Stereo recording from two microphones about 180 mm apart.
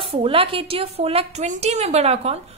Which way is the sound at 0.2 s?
30° right (ahead or behind).